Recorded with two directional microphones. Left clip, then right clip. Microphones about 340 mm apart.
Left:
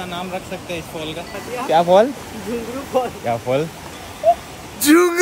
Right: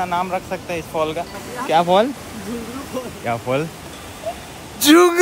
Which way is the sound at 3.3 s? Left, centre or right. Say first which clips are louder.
Right 2 dB; centre.